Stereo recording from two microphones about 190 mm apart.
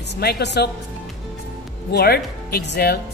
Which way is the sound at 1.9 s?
55° left (ahead or behind).